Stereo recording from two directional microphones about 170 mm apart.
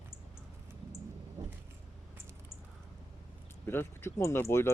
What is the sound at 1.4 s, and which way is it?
Vehicle, 25° right (ahead or behind).